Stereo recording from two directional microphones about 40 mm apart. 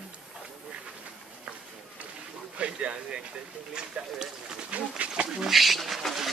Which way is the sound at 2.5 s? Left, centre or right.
Right.